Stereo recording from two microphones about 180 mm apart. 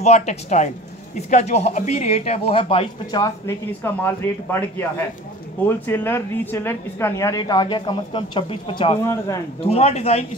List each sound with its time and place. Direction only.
0.0 s speech: 40° left (ahead or behind)
3.2 s speech: 15° left (ahead or behind); by 8.9 s 30° left (ahead or behind)
9.0 s speech: 15° left (ahead or behind)
9.6 s speech: 35° left (ahead or behind)